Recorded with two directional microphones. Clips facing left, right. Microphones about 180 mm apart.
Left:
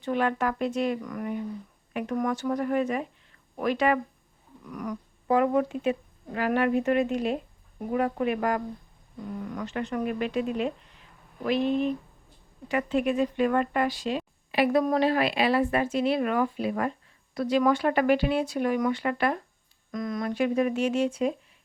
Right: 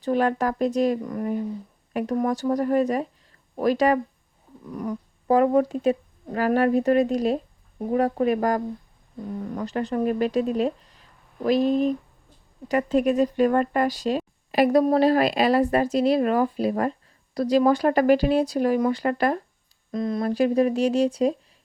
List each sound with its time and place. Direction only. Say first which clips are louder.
0.0 s speech: right 4 dB; 40° right (ahead or behind)